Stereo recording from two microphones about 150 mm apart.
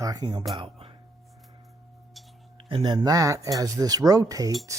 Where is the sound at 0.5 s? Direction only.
35° right (ahead or behind).